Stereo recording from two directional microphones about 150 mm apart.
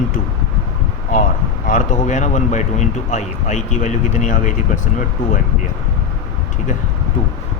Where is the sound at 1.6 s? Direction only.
55° left (ahead or behind).